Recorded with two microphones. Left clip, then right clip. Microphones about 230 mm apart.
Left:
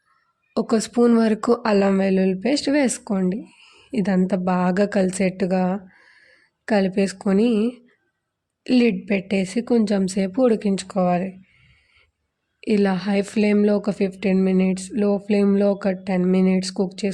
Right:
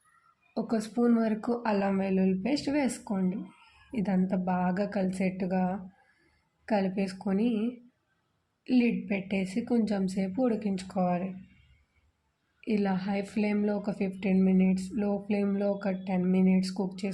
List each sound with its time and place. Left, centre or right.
0.5 s speech: left
12.5 s speech: left